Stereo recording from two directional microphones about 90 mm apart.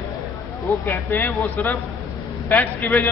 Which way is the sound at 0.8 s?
20° left (ahead or behind).